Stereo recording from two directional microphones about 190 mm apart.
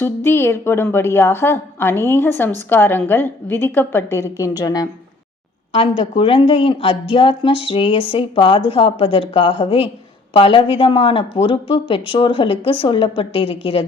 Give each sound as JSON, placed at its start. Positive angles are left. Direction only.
{"t": 0.0, "sound": "a woman's voice", "side_deg": 10}
{"t": 6.0, "sound": "speech", "side_deg": 30}